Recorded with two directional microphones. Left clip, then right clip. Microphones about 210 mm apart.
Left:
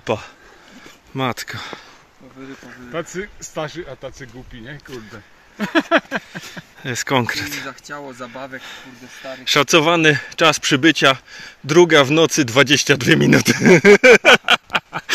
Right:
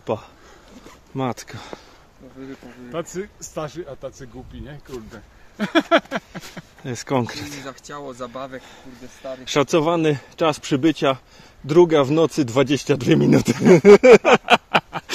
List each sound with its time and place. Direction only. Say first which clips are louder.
0.0 s speech: left 3 dB; 5° left (ahead or behind)
2.9 s speech: left 2 dB; 30° left (ahead or behind)
6.8 s speech: left 4 dB; 5° right (ahead or behind)